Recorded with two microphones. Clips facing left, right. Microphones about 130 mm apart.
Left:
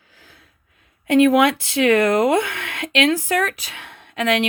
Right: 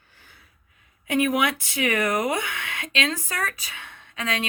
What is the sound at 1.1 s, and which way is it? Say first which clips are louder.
Speech: left 8 dB; 75° left (ahead or behind).